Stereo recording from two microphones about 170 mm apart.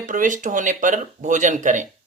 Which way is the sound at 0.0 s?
50° right (ahead or behind).